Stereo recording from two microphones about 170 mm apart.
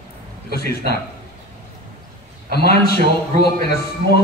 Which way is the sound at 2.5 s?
70° left (ahead or behind).